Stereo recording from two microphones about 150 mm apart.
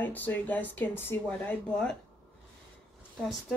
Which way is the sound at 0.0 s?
10° left (ahead or behind).